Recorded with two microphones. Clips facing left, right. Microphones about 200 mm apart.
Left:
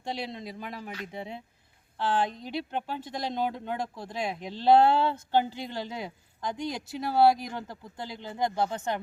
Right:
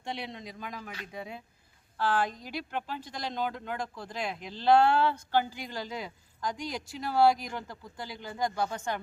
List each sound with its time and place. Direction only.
0.0 s speech: 30° left (ahead or behind)